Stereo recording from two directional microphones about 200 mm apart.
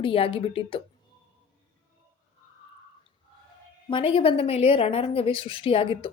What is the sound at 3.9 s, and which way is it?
A woman's voice, 25° left (ahead or behind).